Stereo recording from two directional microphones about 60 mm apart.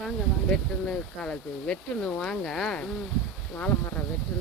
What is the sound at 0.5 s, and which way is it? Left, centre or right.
Speech, centre.